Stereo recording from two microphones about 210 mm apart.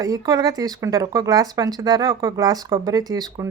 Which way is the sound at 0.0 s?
15° right (ahead or behind).